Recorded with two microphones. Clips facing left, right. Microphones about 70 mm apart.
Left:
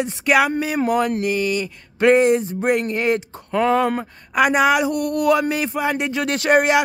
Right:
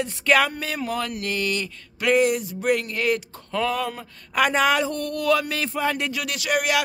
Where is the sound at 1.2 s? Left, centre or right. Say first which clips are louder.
Left 5 dB; centre.